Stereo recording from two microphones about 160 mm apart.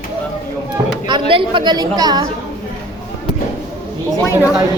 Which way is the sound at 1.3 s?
30° right (ahead or behind).